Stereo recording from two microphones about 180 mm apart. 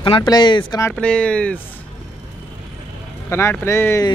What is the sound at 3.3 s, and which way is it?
Speech, 15° left (ahead or behind).